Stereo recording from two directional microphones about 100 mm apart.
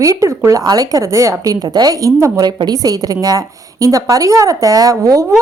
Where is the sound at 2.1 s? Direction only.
30° right (ahead or behind).